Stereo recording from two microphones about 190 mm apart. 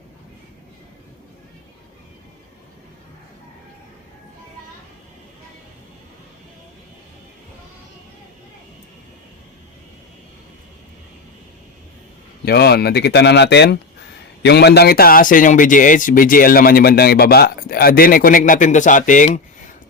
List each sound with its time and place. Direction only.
12.5 s a man's voice: 60° left (ahead or behind); by 19.4 s 40° left (ahead or behind)